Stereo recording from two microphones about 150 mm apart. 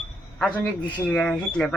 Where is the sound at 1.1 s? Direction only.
5° left (ahead or behind).